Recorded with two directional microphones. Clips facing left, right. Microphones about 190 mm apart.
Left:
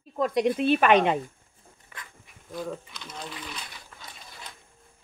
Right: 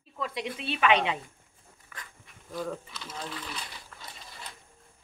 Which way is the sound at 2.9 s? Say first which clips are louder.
Even; 5° right (ahead or behind).